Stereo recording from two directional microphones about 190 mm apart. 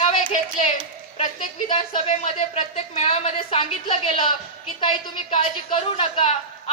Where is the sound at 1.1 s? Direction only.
40° left (ahead or behind).